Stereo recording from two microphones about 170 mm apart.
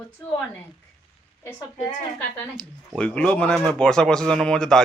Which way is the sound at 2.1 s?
5° left (ahead or behind).